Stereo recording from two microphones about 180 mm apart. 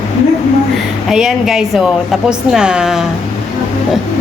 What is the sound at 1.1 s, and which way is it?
A woman's voice, 5° right (ahead or behind).